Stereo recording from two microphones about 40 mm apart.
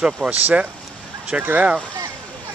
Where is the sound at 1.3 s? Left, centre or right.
Right.